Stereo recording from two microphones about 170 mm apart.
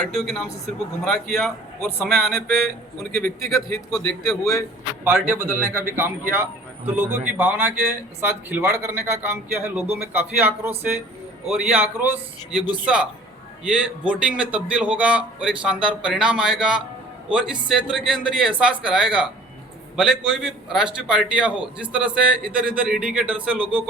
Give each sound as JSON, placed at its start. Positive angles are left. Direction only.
{"t": 0.0, "sound": "a man's voice", "side_deg": 0}
{"t": 3.1, "sound": "a man's voice", "side_deg": 15}
{"t": 3.9, "sound": "a man's voice", "side_deg": 5}
{"t": 5.0, "sound": "a man's voice", "side_deg": -15}